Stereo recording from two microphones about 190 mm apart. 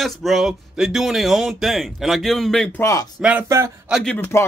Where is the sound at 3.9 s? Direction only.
5° left (ahead or behind).